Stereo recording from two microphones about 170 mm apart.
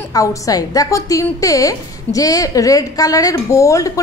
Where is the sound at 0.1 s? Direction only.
20° left (ahead or behind).